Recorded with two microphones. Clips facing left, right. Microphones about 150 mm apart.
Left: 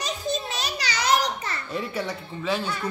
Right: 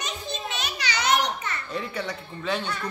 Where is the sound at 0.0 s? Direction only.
35° left (ahead or behind).